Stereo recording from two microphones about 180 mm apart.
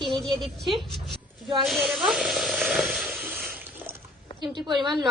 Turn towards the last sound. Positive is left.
turn(degrees=0)  # may be behind; listen again after turning